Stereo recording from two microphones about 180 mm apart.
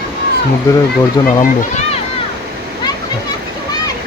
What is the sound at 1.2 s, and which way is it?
Speech, 25° left (ahead or behind).